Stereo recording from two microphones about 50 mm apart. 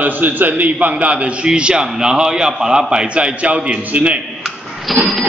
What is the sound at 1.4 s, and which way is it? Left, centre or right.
A man's voice, centre.